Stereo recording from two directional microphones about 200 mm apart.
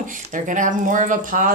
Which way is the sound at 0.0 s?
40° right (ahead or behind).